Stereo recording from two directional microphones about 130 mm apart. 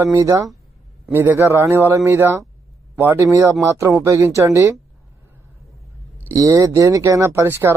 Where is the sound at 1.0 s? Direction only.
15° right (ahead or behind).